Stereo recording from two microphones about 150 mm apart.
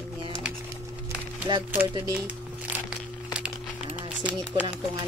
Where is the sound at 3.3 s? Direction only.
5° right (ahead or behind).